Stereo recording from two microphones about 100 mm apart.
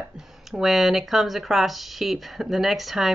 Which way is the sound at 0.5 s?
Centre (ahead or behind).